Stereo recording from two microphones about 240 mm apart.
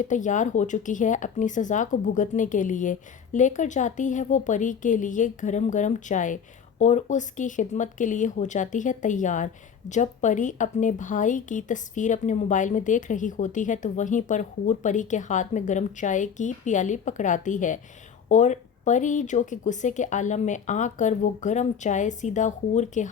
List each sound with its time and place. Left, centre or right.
0.0 s speech: left